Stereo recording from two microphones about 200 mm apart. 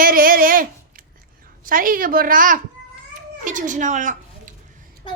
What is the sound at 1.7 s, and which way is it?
A woman's voice, 45° right (ahead or behind).